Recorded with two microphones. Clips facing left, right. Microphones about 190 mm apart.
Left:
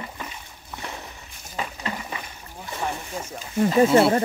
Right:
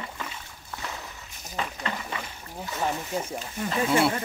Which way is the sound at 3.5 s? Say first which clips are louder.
Left 9 dB; 45° left (ahead or behind).